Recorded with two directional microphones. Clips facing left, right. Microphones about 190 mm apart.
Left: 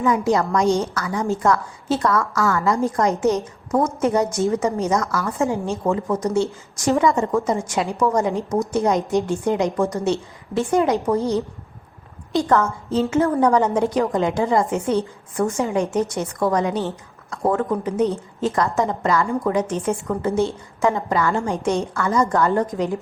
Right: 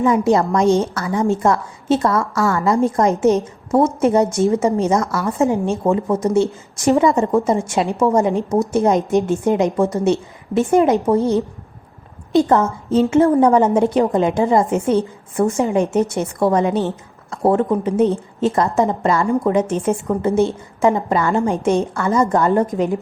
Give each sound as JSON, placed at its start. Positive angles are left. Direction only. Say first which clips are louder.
{"t": 0.0, "sound": "a woman's voice", "louder": "right 4 dB", "side_deg": -25}
{"t": 12.3, "sound": "a woman's voice", "louder": "right 4 dB", "side_deg": -20}